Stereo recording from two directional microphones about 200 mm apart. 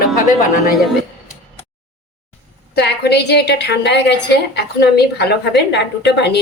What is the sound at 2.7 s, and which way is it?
A woman's voice, 55° left (ahead or behind).